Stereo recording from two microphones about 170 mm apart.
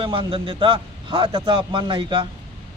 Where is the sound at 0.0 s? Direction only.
30° right (ahead or behind).